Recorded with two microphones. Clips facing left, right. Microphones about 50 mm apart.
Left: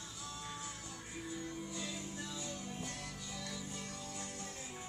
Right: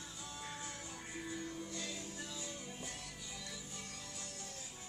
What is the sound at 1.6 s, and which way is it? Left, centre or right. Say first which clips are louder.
Music: left 1 dB; centre.